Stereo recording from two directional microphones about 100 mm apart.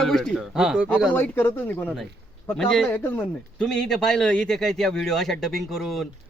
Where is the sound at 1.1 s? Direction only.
20° left (ahead or behind).